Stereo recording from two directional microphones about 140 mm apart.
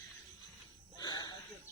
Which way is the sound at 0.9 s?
30° left (ahead or behind).